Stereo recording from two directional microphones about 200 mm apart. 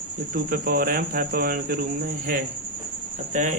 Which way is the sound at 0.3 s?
45° right (ahead or behind).